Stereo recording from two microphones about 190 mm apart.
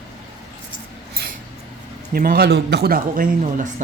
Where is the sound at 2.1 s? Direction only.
50° right (ahead or behind).